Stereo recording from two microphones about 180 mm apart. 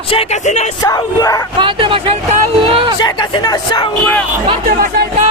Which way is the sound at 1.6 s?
30° right (ahead or behind).